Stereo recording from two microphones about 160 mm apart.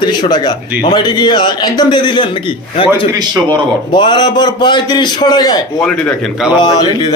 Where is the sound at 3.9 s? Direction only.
30° left (ahead or behind).